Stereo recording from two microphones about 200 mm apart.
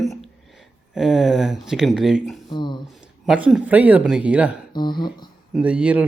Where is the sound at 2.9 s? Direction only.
5° right (ahead or behind).